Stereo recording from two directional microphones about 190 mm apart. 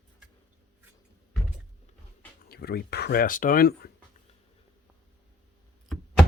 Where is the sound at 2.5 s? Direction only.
55° left (ahead or behind).